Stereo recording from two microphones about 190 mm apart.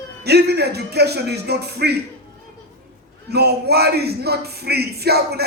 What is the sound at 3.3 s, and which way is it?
Speech, 60° right (ahead or behind).